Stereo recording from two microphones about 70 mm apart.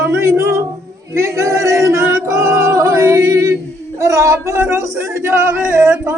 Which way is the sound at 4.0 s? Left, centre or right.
Right.